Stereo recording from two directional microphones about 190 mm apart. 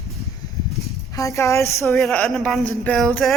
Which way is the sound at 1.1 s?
15° left (ahead or behind).